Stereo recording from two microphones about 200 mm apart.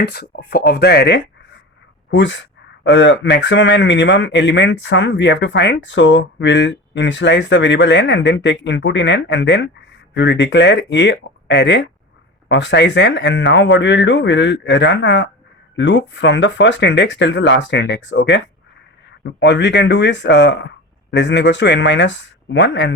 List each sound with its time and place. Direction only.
0.0 s a man's voice: 55° left (ahead or behind)